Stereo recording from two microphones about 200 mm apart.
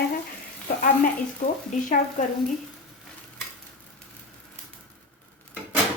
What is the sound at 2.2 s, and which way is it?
Speech, 40° left (ahead or behind).